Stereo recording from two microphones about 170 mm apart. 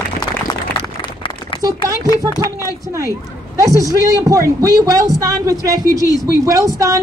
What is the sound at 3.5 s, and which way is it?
A woman's voice, 20° right (ahead or behind).